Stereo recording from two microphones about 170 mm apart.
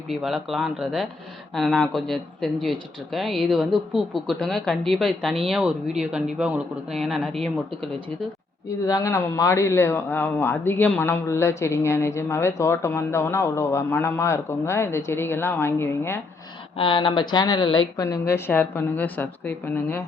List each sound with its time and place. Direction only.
0.1 s speech: centre (ahead or behind)
8.8 s speech: 20° left (ahead or behind)
16.7 s speech: 30° left (ahead or behind); by 20.1 s 10° left (ahead or behind)